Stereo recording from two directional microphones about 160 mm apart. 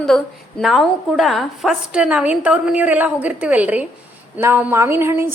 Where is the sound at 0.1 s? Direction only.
5° left (ahead or behind).